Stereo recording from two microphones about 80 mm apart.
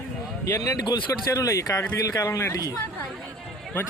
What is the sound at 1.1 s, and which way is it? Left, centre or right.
Speech, left.